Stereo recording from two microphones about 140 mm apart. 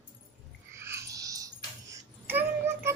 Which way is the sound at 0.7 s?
20° right (ahead or behind).